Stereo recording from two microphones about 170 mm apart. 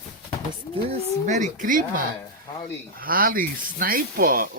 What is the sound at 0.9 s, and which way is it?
Speech, 45° right (ahead or behind).